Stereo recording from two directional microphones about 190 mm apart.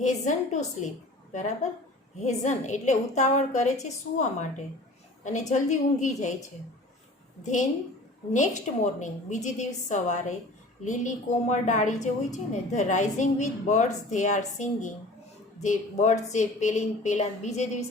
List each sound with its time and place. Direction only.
0.0 s a woman's voice: 40° left (ahead or behind)
8.3 s a woman's voice: 40° left (ahead or behind)